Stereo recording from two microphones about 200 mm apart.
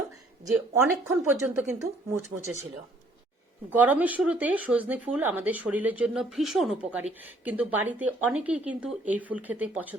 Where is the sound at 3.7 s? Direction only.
10° right (ahead or behind).